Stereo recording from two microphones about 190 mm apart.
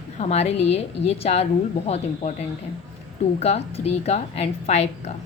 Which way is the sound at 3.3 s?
35° left (ahead or behind).